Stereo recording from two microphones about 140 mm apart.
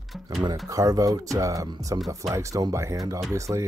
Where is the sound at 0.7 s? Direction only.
25° right (ahead or behind).